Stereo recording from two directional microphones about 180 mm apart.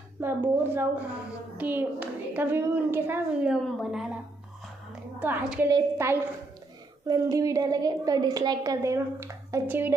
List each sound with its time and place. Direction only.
0.2 s a woman's voice: 10° right (ahead or behind)
5.2 s a woman's voice: 10° right (ahead or behind)